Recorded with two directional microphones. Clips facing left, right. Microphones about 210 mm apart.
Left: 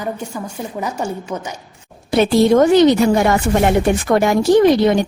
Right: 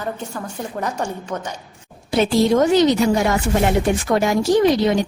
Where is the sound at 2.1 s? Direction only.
60° left (ahead or behind).